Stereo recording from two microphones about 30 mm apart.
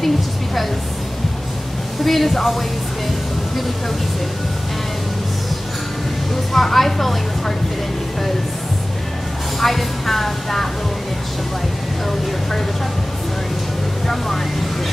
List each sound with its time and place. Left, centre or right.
2.0 s speech: centre
6.5 s a woman's voice: centre
9.6 s a woman's voice: centre